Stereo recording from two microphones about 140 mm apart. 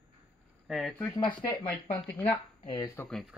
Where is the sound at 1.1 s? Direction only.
30° left (ahead or behind).